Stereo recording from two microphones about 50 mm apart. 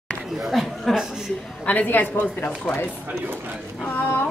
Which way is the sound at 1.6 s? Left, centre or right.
Left.